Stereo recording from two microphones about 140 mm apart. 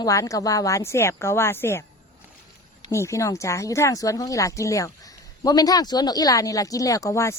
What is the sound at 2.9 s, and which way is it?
Speech, 20° left (ahead or behind).